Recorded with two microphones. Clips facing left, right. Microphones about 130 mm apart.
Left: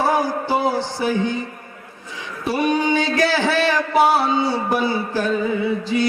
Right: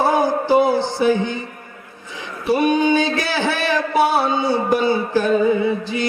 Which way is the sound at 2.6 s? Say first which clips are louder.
Right 2 dB; 20° right (ahead or behind).